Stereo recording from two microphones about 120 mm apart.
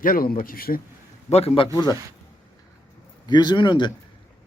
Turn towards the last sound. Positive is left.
turn(degrees=40)  # may be behind; listen again after turning